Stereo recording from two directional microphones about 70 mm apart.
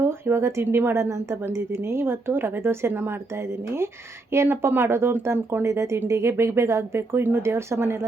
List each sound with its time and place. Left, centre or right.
0.0 s speech: right